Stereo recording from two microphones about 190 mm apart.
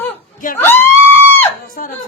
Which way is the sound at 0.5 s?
10° left (ahead or behind).